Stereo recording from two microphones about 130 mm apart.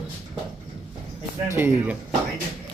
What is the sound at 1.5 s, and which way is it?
Speech, 15° right (ahead or behind).